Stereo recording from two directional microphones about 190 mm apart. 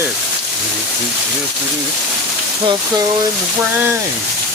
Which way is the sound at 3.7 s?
10° right (ahead or behind).